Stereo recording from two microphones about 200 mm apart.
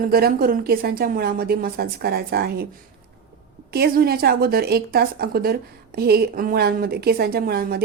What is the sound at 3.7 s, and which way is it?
A woman's voice, 50° right (ahead or behind).